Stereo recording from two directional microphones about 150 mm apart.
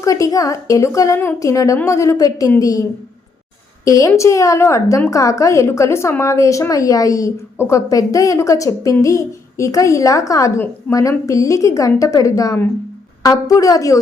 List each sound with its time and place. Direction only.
0.0 s a woman's voice: 20° left (ahead or behind)
3.8 s a woman's voice: 20° left (ahead or behind)